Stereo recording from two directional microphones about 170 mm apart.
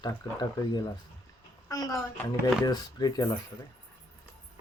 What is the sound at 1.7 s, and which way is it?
A child's voice, 20° left (ahead or behind).